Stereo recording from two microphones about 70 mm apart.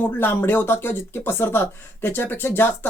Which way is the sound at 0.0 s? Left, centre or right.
Left.